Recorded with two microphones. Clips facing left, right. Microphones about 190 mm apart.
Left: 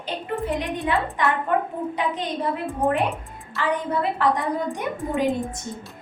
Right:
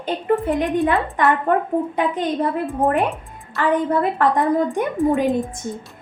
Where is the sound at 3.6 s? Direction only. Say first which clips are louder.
Right 6 dB; 50° right (ahead or behind).